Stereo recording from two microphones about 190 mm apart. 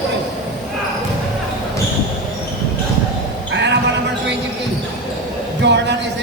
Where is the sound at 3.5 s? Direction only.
65° right (ahead or behind).